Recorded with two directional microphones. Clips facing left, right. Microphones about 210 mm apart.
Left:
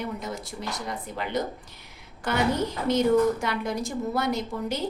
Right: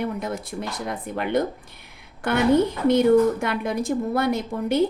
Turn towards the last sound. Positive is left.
turn(degrees=-55)  # may be behind; listen again after turning